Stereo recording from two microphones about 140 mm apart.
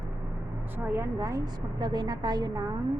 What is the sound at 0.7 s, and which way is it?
A woman's voice, 15° right (ahead or behind).